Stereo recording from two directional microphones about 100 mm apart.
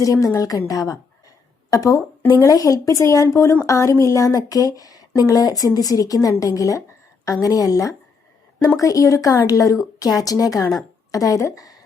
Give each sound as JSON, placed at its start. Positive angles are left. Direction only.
{"t": 0.0, "sound": "speech", "side_deg": 35}